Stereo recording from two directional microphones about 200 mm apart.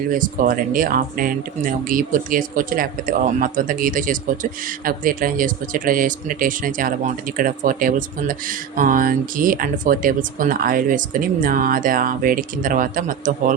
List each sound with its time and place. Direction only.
0.1 s speech: 40° right (ahead or behind)